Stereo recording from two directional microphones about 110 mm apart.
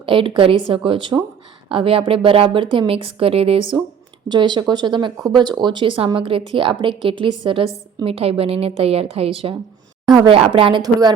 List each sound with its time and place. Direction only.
0.0 s speech: 50° right (ahead or behind)
4.3 s speech: 45° right (ahead or behind)